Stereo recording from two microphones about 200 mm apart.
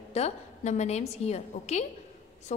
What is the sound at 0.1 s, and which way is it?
A woman's voice, 35° left (ahead or behind).